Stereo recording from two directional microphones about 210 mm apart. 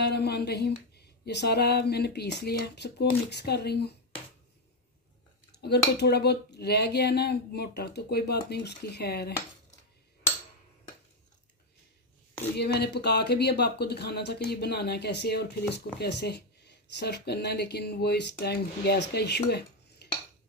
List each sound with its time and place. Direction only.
0.0 s speech: 50° left (ahead or behind)
5.9 s speech: 50° left (ahead or behind)
12.5 s speech: 50° left (ahead or behind)